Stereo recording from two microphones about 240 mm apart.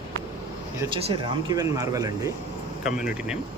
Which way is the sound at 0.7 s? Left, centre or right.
Right.